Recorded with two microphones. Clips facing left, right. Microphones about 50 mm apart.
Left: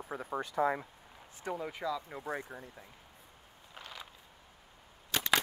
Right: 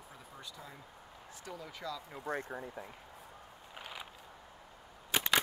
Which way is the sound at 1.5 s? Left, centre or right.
Left.